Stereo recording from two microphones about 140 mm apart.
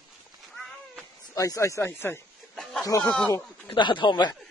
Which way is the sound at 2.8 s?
25° left (ahead or behind).